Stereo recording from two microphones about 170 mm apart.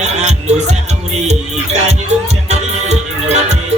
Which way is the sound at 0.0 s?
40° right (ahead or behind).